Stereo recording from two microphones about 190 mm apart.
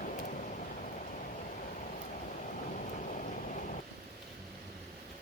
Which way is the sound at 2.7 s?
40° left (ahead or behind).